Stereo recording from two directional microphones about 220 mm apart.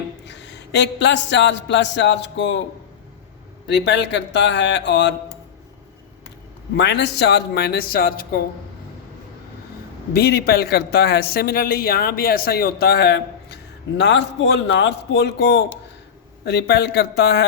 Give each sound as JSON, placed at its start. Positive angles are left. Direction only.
{"t": 0.3, "sound": "a man's voice", "side_deg": 50}
{"t": 3.8, "sound": "a man's voice", "side_deg": 50}
{"t": 6.7, "sound": "a man's voice", "side_deg": 50}
{"t": 10.1, "sound": "a man's voice", "side_deg": 45}